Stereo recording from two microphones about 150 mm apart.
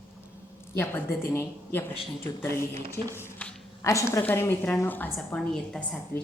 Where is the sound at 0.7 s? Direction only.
15° left (ahead or behind).